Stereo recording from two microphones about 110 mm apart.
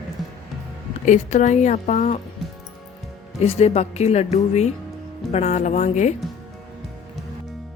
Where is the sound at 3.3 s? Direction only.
75° left (ahead or behind).